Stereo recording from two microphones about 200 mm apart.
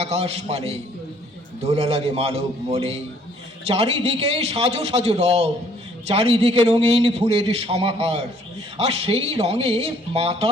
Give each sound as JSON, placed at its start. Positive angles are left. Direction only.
{"t": 0.0, "sound": "a man's voice", "side_deg": -30}